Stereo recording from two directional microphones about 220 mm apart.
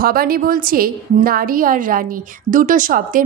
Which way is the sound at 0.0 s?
40° right (ahead or behind).